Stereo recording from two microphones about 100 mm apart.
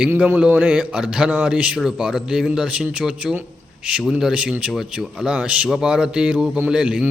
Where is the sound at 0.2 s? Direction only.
10° right (ahead or behind).